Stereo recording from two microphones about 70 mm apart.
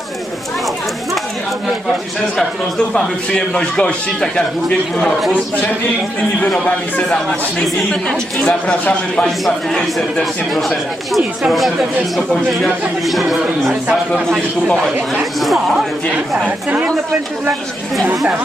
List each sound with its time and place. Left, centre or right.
2.4 s a man's voice: centre
6.4 s a man's voice: centre
10.5 s speech: centre
15.2 s speech: centre
16.5 s speech: right